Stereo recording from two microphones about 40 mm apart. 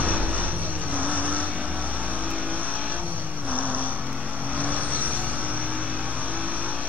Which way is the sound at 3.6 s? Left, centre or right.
Right.